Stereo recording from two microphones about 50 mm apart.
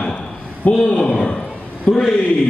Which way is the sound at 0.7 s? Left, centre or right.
Centre.